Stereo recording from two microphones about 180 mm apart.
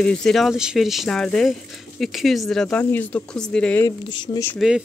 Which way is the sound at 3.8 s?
15° left (ahead or behind).